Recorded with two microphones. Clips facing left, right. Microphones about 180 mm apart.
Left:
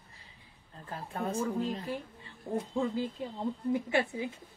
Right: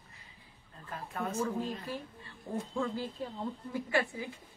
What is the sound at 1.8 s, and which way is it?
A woman's voice, 15° left (ahead or behind).